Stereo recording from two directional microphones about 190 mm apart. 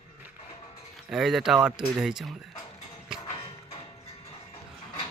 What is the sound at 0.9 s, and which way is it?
A man's voice, centre (ahead or behind).